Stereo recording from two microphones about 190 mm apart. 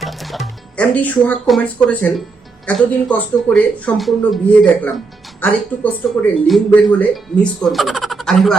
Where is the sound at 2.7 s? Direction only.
5° left (ahead or behind).